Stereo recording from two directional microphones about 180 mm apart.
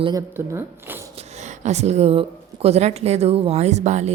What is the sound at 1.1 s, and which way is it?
A woman's voice, 40° right (ahead or behind).